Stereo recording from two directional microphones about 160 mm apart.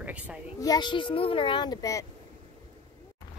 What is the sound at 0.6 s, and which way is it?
A child's voice, 25° left (ahead or behind).